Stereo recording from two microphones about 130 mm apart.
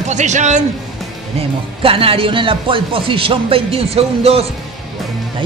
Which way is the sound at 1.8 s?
45° right (ahead or behind).